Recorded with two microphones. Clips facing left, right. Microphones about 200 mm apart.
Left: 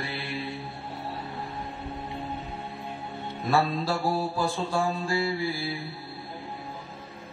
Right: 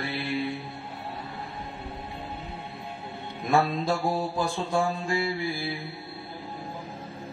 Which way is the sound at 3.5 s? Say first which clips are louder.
Right 1 dB; 15° right (ahead or behind).